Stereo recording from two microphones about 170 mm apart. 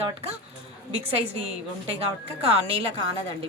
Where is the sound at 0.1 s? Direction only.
35° right (ahead or behind).